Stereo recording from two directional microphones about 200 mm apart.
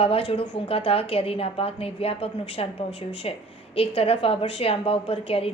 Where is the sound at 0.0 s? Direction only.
30° left (ahead or behind).